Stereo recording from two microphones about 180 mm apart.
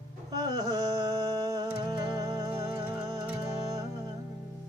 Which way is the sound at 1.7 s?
20° right (ahead or behind).